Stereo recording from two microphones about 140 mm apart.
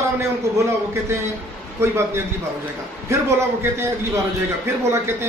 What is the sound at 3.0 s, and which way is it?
Speech, 20° right (ahead or behind).